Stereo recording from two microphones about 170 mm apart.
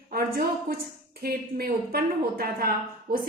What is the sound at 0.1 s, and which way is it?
A woman's voice, 65° right (ahead or behind).